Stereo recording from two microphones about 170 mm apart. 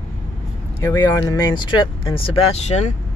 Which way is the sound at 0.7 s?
20° left (ahead or behind).